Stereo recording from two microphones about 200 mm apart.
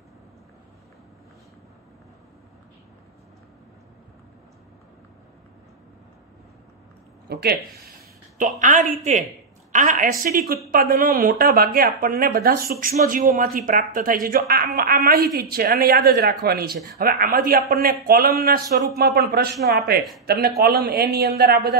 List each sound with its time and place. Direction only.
7.2 s speech: 50° right (ahead or behind)
8.5 s a woman's voice: 40° right (ahead or behind)